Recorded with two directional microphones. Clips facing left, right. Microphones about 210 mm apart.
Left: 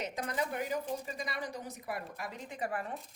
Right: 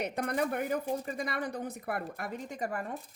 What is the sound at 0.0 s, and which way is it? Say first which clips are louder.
Speech: right 5 dB; 60° right (ahead or behind).